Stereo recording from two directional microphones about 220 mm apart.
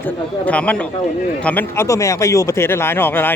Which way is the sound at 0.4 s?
5° left (ahead or behind).